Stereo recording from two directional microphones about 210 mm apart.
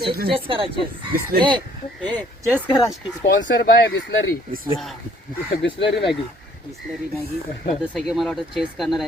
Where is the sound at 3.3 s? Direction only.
60° left (ahead or behind).